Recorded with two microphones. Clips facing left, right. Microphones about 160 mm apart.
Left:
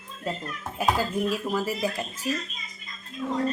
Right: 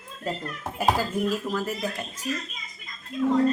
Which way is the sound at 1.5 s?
10° left (ahead or behind).